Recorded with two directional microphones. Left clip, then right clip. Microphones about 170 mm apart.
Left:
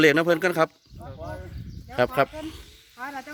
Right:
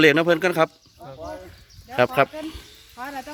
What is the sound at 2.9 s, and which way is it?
Snake, 25° right (ahead or behind).